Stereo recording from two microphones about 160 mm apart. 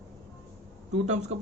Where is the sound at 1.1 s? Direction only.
45° right (ahead or behind).